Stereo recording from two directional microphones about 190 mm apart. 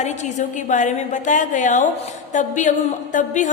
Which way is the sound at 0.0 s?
35° left (ahead or behind).